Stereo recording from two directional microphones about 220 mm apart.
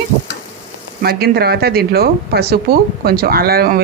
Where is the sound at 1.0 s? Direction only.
45° right (ahead or behind).